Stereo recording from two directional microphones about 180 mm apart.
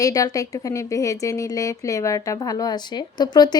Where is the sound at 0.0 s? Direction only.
20° left (ahead or behind).